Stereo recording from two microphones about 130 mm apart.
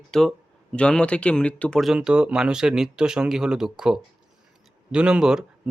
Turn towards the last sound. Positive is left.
turn(degrees=-5)  # may be behind; listen again after turning